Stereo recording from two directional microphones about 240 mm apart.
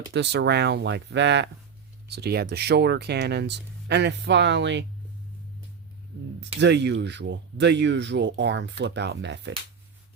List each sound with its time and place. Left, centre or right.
0.1 s speech: right
6.6 s speech: right